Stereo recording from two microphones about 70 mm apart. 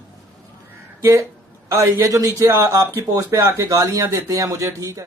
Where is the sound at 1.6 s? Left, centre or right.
Right.